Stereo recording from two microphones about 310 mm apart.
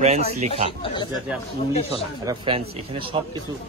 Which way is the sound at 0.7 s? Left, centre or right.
Centre.